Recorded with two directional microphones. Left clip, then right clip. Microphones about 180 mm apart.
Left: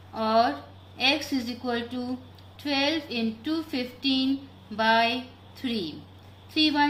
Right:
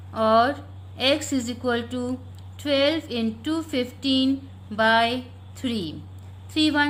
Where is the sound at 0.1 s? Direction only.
45° right (ahead or behind).